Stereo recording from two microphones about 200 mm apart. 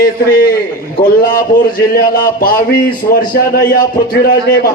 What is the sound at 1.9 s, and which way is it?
A man's voice, 45° left (ahead or behind).